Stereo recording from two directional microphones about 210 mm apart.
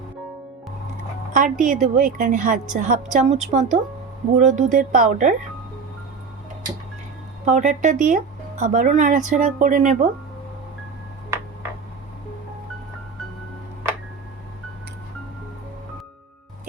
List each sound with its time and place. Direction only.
1.3 s speech: 40° right (ahead or behind)
7.4 s speech: 35° right (ahead or behind)